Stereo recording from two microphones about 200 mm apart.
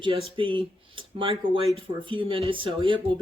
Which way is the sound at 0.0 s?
25° right (ahead or behind).